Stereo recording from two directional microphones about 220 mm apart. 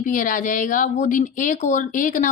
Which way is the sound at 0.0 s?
35° left (ahead or behind).